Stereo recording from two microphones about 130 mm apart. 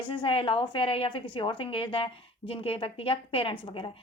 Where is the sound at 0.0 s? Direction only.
40° left (ahead or behind).